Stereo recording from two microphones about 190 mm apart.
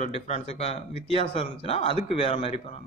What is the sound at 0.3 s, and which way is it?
A man's voice, 35° left (ahead or behind).